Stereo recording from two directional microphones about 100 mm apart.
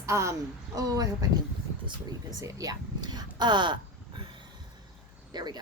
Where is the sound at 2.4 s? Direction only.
35° right (ahead or behind).